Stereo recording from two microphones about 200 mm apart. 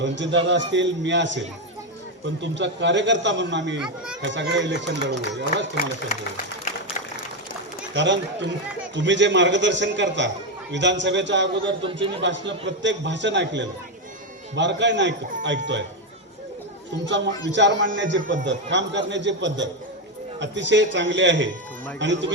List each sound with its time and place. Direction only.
0.0 s a man's voice: 65° right (ahead or behind)
3.8 s speech: 5° right (ahead or behind)
4.2 s a man's voice: 65° right (ahead or behind)
7.9 s a man's voice: 65° right (ahead or behind)
17.1 s a man's voice: 65° right (ahead or behind)